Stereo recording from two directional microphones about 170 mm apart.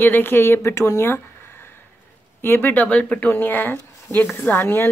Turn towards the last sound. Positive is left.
turn(degrees=10)  # may be behind; listen again after turning